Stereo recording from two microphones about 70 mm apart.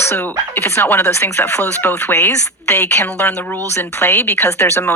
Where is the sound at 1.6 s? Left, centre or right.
Left.